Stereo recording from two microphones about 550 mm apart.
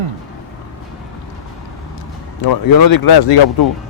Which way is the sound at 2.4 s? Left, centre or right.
Left.